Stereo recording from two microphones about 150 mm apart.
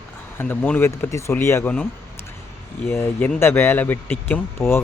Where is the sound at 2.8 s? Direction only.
15° left (ahead or behind).